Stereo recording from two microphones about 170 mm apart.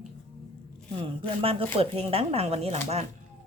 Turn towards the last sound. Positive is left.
turn(degrees=-40)  # may be behind; listen again after turning